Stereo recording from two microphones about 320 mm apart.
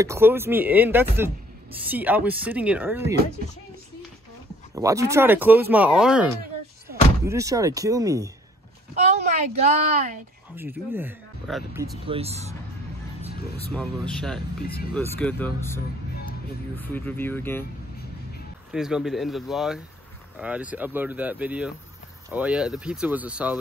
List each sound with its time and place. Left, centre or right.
0.0 s speech: centre
4.7 s speech: centre
7.2 s speech: centre
9.1 s a woman's voice: right
10.5 s speech: centre
13.7 s speech: centre
18.7 s speech: centre